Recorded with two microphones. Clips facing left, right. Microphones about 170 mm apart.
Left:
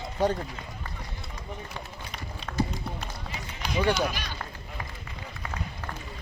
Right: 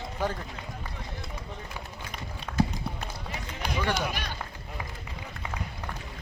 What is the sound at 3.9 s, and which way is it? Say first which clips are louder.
Speech: left 2 dB; 55° right (ahead or behind).